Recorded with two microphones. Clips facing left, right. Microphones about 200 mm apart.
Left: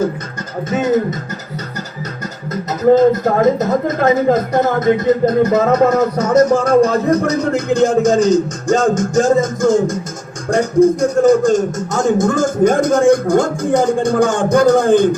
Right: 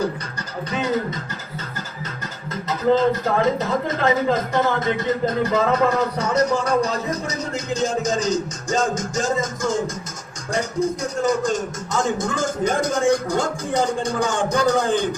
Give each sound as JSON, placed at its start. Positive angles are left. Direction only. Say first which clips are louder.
{"t": 0.7, "sound": "speech", "louder": "left 8 dB", "side_deg": 40}
{"t": 2.5, "sound": "speech", "louder": "left 7 dB", "side_deg": 40}